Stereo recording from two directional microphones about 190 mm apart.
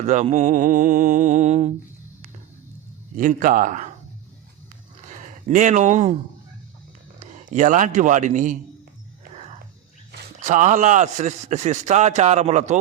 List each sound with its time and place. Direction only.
0.0 s a man's voice: 35° right (ahead or behind)
3.2 s speech: 45° right (ahead or behind)
5.0 s speech: 40° right (ahead or behind)
7.2 s a man's voice: 40° right (ahead or behind)
10.4 s a man's voice: 40° right (ahead or behind)